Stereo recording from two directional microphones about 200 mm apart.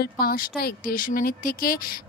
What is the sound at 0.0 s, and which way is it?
A woman's voice, 50° left (ahead or behind).